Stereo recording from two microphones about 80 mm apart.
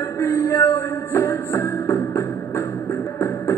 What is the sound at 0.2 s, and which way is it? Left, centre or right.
Music, left.